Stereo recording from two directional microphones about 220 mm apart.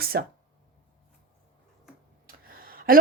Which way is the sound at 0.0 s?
45° right (ahead or behind).